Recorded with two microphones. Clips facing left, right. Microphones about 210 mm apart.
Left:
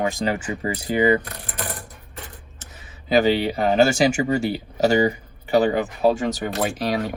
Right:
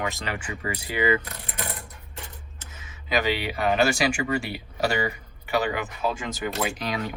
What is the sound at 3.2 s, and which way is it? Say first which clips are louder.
Speech: left 7 dB; 40° left (ahead or behind).